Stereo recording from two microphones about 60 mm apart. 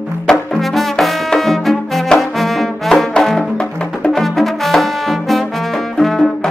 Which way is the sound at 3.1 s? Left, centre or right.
Centre.